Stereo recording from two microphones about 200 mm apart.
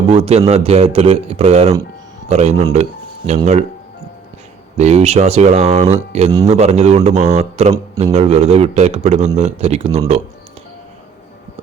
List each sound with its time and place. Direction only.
0.1 s speech: 30° right (ahead or behind)
4.8 s speech: 30° right (ahead or behind)